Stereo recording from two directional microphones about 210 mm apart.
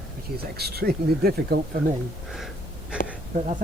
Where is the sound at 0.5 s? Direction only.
50° right (ahead or behind).